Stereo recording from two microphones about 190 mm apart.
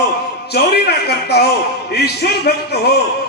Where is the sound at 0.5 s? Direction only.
55° left (ahead or behind).